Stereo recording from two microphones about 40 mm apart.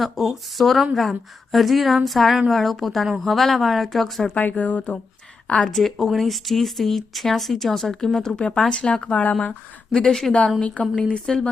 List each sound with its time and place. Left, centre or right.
0.0 s speech: centre
4.4 s speech: left
5.6 s speech: centre
8.7 s speech: left
9.1 s speech: left
9.5 s a woman's voice: centre
10.6 s speech: left